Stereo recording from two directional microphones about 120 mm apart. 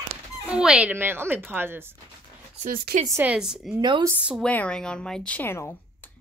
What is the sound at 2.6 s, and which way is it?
Speech, 90° right.